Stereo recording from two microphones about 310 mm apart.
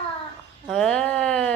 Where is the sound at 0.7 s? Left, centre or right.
Centre.